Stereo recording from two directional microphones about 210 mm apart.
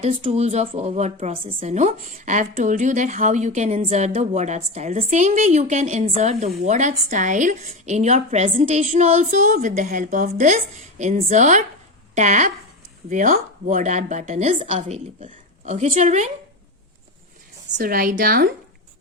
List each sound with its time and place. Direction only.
0.0 s a woman's voice: 30° right (ahead or behind)
17.7 s a woman's voice: 45° right (ahead or behind)